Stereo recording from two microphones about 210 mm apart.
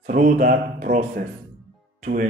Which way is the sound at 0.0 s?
40° right (ahead or behind).